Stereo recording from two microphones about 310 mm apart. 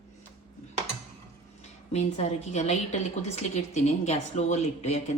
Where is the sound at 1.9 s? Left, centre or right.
Left.